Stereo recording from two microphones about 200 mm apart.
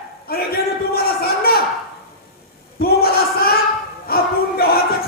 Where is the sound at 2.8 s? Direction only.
50° left (ahead or behind).